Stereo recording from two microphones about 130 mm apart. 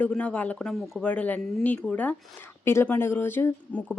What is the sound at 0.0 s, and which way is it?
A woman's voice, 10° left (ahead or behind).